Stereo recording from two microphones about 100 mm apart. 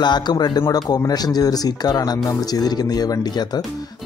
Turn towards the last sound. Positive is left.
turn(degrees=45)  # may be behind; listen again after turning